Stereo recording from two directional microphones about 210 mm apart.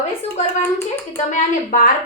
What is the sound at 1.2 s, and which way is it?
Speech, 35° left (ahead or behind).